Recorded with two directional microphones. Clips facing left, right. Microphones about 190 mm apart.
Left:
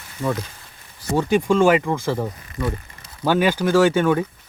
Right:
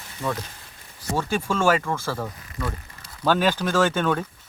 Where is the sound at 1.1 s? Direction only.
15° left (ahead or behind).